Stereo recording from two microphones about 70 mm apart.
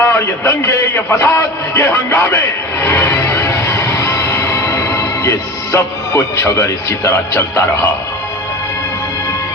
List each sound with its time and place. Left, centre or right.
0.0 s a man's voice: left
2.8 s music: left